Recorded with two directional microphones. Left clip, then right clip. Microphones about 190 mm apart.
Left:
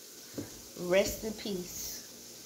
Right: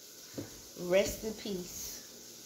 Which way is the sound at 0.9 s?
5° right (ahead or behind).